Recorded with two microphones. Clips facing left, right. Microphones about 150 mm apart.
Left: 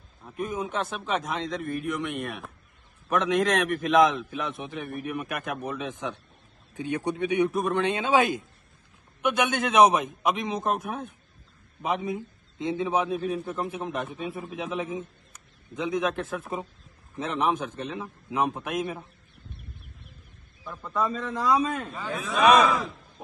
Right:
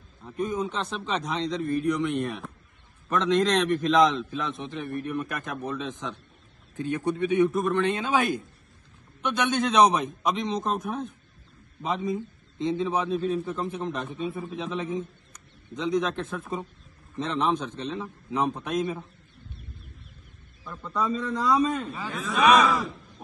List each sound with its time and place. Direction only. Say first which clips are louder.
0.2 s a man's voice: right 3 dB; 5° left (ahead or behind)
7.3 s a man's voice: right 2 dB; 15° left (ahead or behind)
9.2 s a man's voice: even; 10° left (ahead or behind)
20.6 s a man's voice: even; 5° left (ahead or behind)